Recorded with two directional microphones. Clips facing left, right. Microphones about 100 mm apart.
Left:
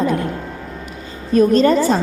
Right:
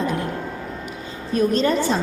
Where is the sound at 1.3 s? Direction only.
40° left (ahead or behind).